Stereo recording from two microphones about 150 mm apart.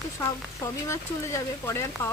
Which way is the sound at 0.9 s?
20° left (ahead or behind).